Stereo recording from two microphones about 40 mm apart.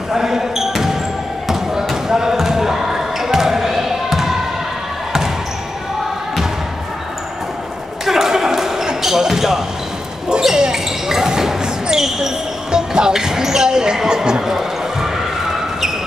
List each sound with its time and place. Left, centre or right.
0.1 s basketball bounce: centre
8.0 s a sound: centre
9.0 s basketball bounce: centre